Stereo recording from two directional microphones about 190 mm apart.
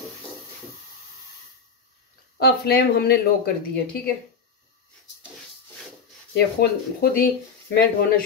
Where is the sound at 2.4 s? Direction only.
55° left (ahead or behind).